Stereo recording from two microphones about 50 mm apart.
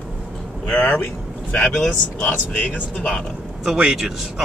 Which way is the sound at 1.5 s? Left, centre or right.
Left.